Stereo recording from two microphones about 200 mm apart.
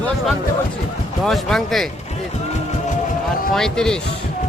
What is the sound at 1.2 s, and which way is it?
Speech, centre (ahead or behind).